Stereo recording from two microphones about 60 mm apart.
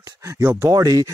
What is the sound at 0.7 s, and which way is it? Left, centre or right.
Speech, right.